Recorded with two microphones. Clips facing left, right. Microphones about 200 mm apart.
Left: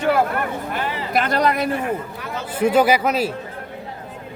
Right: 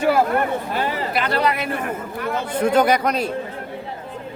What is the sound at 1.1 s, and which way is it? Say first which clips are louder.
Speech: left 4 dB; 45° left (ahead or behind).